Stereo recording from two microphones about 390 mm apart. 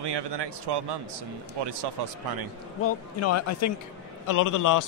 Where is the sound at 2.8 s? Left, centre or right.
Left.